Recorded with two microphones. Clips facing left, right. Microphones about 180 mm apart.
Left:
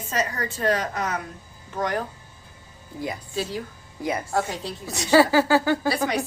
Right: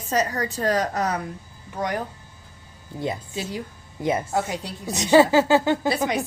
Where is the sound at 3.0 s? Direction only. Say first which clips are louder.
Right 1 dB; 25° right (ahead or behind).